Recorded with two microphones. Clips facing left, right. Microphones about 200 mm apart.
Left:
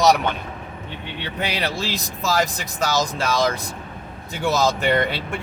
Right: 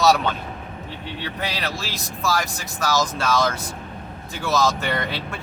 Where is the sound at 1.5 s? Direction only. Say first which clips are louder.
Left 4 dB; 20° left (ahead or behind).